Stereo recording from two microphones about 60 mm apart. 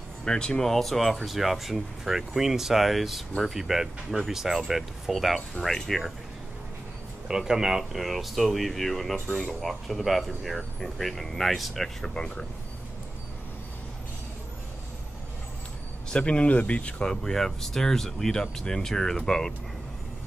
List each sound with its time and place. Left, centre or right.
0.2 s speech: centre
7.2 s speech: centre
16.1 s speech: centre
17.0 s speech: centre